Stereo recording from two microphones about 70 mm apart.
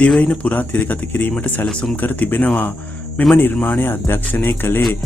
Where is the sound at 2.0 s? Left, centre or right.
Left.